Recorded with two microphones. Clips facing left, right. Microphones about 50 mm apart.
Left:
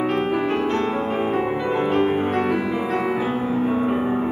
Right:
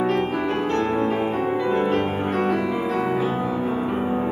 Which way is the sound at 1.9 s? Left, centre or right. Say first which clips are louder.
Left 3 dB; centre.